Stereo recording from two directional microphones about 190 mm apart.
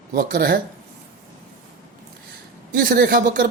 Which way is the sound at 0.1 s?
50° right (ahead or behind).